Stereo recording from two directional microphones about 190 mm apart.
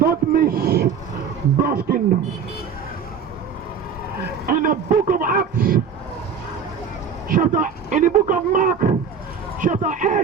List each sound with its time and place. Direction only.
0.0 s a sound: 50° right (ahead or behind)
1.6 s speech: 50° right (ahead or behind)
4.4 s vehicle: 45° right (ahead or behind)
7.3 s speech: 45° right (ahead or behind)